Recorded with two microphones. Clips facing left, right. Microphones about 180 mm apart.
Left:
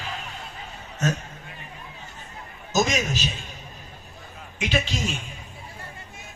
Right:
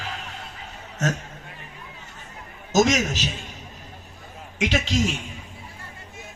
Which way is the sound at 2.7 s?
85° right.